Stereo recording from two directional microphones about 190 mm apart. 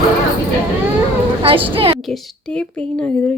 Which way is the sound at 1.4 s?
30° right (ahead or behind).